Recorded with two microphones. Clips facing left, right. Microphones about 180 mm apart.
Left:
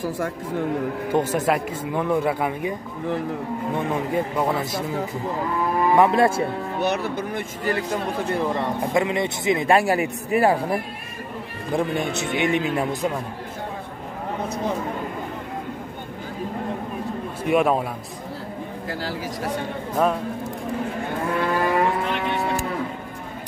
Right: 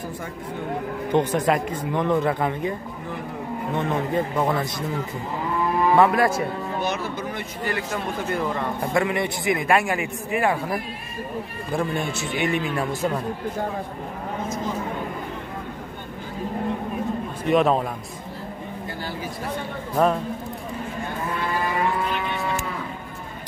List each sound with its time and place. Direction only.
1.1 s speech: 5° left (ahead or behind)
3.7 s speech: 10° left (ahead or behind)
5.9 s a man's voice: 25° left (ahead or behind)
6.8 s speech: 60° left (ahead or behind)
7.6 s a man's voice: 35° left (ahead or behind)
8.9 s a man's voice: 20° left (ahead or behind)
11.7 s a man's voice: 20° left (ahead or behind)
17.5 s speech: 10° left (ahead or behind)
20.0 s a man's voice: centre (ahead or behind)
21.7 s livestock: 70° left (ahead or behind)